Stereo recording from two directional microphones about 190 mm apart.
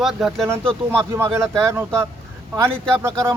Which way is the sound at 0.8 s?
15° right (ahead or behind).